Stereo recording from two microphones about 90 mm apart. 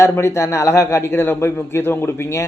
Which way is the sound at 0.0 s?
30° left (ahead or behind).